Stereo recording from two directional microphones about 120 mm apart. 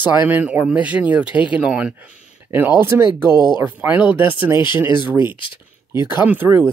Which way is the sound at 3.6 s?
15° right (ahead or behind).